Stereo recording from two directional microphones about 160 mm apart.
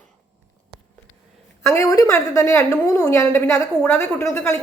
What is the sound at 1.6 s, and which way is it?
A woman's voice, 15° left (ahead or behind).